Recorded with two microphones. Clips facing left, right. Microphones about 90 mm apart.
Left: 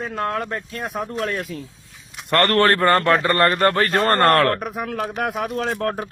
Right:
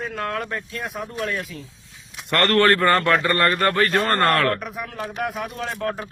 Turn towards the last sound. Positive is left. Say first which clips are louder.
# left 4 dB
turn(degrees=45)  # may be behind; listen again after turning